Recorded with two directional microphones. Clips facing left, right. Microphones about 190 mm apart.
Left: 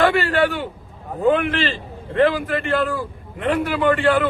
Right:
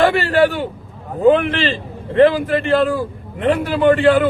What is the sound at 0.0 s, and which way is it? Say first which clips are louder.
A man's voice: right 3 dB; 30° right (ahead or behind).